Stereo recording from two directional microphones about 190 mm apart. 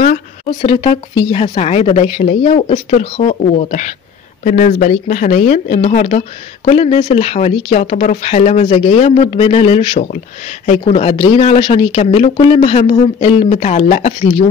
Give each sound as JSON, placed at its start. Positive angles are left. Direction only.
{"t": 0.7, "sound": "speech", "side_deg": 25}